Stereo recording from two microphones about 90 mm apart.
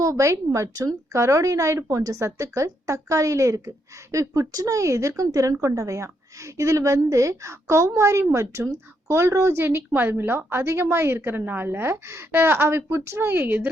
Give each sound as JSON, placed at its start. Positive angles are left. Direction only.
{"t": 0.0, "sound": "a woman's voice", "side_deg": -35}